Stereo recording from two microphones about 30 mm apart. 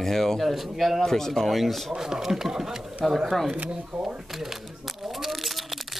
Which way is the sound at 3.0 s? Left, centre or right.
Centre.